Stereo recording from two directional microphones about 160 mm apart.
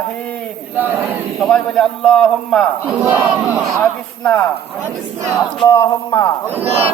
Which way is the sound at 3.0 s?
10° right (ahead or behind).